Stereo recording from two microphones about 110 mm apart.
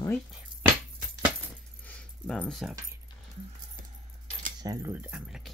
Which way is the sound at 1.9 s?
10° left (ahead or behind).